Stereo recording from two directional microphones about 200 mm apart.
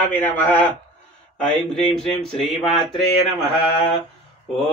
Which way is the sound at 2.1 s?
Centre (ahead or behind).